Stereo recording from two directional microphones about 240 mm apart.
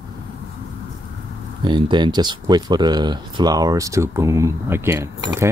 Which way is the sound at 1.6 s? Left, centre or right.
Centre.